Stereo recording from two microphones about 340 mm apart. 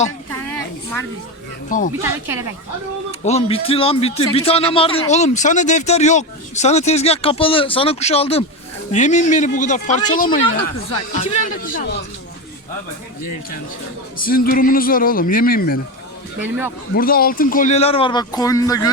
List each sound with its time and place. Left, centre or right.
2.0 s speech: centre
3.1 s a man's voice: centre
14.2 s speech: left
16.4 s speech: centre
16.9 s a man's voice: left; by 18.9 s centre